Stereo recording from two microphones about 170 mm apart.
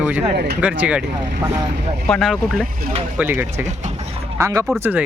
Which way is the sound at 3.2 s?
10° right (ahead or behind).